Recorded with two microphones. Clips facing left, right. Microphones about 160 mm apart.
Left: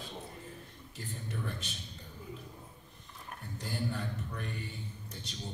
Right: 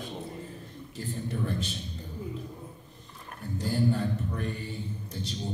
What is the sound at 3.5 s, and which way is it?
A man's voice, 35° right (ahead or behind).